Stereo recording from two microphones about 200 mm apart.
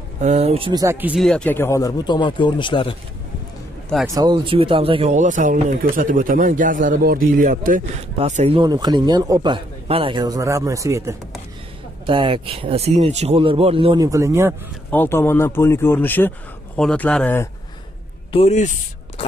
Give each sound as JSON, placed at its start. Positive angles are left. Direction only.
{"t": 0.2, "sound": "speech", "side_deg": -35}
{"t": 4.1, "sound": "speech", "side_deg": -20}
{"t": 8.2, "sound": "a man's voice", "side_deg": -30}
{"t": 14.9, "sound": "speech", "side_deg": 10}
{"t": 18.3, "sound": "speech", "side_deg": 35}